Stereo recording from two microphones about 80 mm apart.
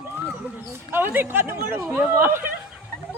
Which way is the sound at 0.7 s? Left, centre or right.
Right.